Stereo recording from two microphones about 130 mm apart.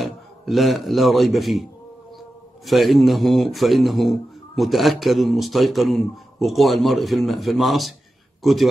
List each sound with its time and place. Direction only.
0.0 s a man's voice: centre (ahead or behind)